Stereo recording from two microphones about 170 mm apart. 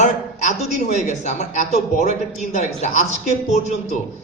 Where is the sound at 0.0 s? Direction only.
45° left (ahead or behind).